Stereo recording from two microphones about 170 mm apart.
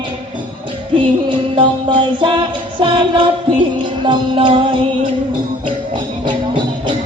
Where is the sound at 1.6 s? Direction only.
30° right (ahead or behind).